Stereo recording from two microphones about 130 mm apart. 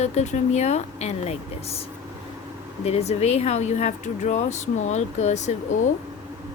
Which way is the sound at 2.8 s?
55° left (ahead or behind).